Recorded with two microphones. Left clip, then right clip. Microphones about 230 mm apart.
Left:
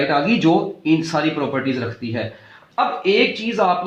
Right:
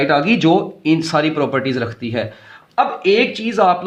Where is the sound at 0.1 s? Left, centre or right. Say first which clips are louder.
Right 3 dB; right.